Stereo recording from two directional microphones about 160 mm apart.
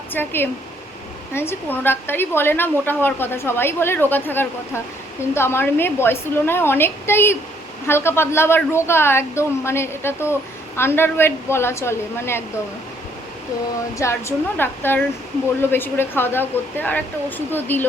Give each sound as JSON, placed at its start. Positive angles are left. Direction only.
{"t": 0.1, "sound": "a woman's voice", "side_deg": 15}
{"t": 14.0, "sound": "a woman's voice", "side_deg": 15}